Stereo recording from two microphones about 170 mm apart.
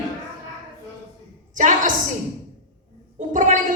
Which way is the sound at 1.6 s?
50° right (ahead or behind).